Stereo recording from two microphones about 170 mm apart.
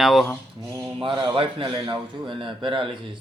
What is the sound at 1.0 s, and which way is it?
Speech, 30° right (ahead or behind).